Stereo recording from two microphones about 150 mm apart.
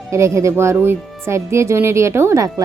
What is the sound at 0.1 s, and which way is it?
Speech, 20° right (ahead or behind).